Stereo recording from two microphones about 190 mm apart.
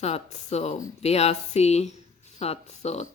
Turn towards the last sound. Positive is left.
turn(degrees=35)  # may be behind; listen again after turning